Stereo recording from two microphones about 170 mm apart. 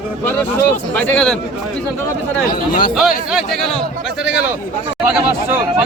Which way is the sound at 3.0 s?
5° right (ahead or behind).